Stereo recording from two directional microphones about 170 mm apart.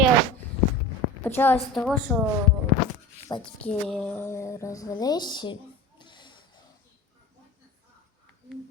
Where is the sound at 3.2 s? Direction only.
25° left (ahead or behind).